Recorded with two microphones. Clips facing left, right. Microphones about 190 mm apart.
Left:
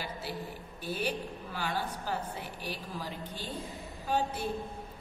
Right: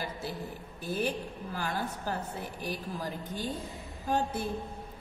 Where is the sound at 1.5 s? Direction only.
45° right (ahead or behind).